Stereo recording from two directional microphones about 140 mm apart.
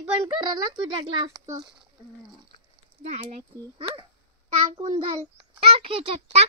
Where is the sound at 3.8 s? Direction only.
40° right (ahead or behind).